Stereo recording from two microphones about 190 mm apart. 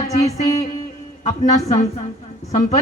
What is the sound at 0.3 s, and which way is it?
Speech, 15° left (ahead or behind).